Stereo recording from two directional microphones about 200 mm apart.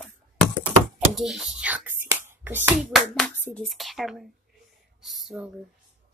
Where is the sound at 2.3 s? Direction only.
10° right (ahead or behind).